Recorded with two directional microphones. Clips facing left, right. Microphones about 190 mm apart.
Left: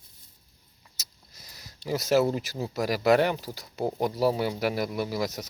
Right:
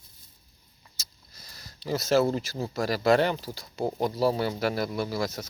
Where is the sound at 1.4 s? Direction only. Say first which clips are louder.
Even; 15° left (ahead or behind).